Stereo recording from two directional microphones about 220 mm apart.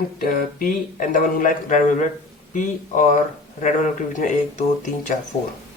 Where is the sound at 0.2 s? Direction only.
40° left (ahead or behind).